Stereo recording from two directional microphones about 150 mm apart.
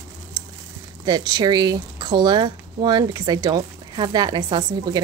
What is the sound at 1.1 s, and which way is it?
Speech, 25° right (ahead or behind).